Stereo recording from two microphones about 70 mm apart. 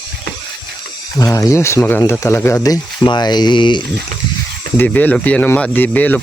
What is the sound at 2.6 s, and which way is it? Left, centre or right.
Speech, left.